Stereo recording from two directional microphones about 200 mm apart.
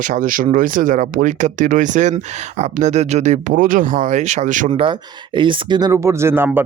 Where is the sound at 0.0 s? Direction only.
40° right (ahead or behind).